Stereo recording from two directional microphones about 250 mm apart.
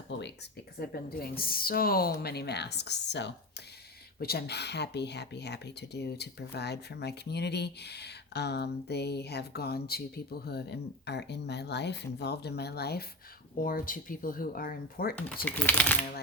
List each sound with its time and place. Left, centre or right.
0.1 s speech: left
15.4 s speech: centre